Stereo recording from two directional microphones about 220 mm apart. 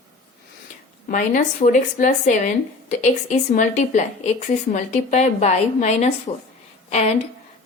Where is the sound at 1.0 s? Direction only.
35° left (ahead or behind).